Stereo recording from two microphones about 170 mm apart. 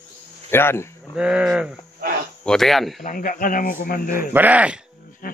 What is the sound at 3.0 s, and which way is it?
Speech, 55° left (ahead or behind).